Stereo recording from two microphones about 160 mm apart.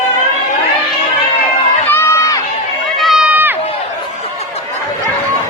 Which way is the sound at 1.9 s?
15° left (ahead or behind).